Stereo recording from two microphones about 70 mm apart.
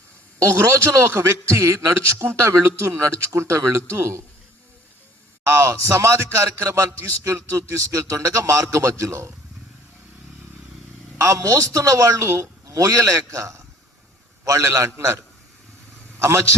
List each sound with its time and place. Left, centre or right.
0.4 s a man's voice: right
5.4 s a man's voice: right
11.2 s a man's voice: right